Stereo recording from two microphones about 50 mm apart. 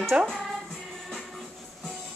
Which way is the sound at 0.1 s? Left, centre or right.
Right.